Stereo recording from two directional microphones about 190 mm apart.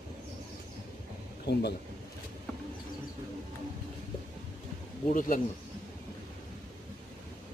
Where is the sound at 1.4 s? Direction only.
60° left (ahead or behind).